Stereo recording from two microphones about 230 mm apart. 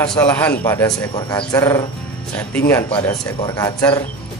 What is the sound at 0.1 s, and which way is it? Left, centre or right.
A man's voice, centre.